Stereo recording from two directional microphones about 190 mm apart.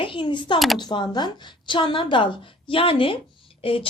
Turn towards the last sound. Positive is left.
turn(degrees=30)  # may be behind; listen again after turning